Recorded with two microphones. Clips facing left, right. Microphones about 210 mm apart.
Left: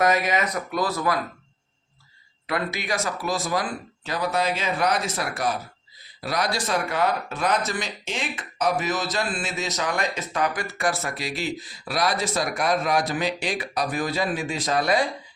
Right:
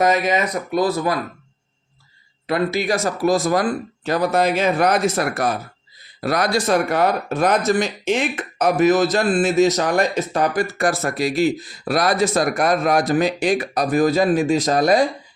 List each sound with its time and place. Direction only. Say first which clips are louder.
0.0 s speech: right 4 dB; 25° right (ahead or behind)
2.5 s speech: right 8 dB; 30° right (ahead or behind)